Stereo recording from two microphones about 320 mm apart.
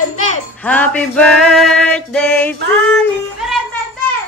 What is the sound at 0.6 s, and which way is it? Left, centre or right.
Music, centre.